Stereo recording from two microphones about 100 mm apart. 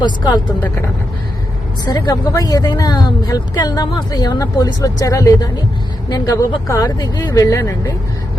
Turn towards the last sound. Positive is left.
turn(degrees=30)  # may be behind; listen again after turning